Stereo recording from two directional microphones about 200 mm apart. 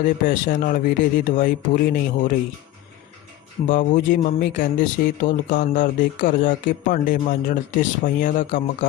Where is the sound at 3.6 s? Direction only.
40° left (ahead or behind).